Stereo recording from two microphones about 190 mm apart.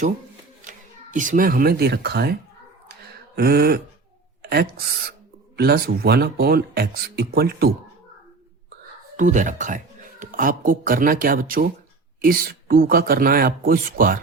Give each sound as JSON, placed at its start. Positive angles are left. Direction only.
{"t": 0.6, "sound": "speech", "side_deg": -40}
{"t": 3.3, "sound": "speech", "side_deg": -55}
{"t": 5.5, "sound": "speech", "side_deg": -55}
{"t": 9.1, "sound": "speech", "side_deg": -40}